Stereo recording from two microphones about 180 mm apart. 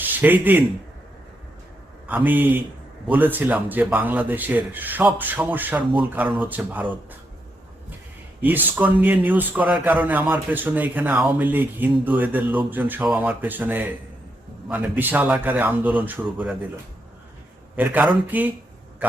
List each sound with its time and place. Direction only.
0.0 s a man's voice: 10° right (ahead or behind)
2.0 s a man's voice: 10° right (ahead or behind)
8.4 s a man's voice: 10° right (ahead or behind)
17.7 s a man's voice: 10° right (ahead or behind)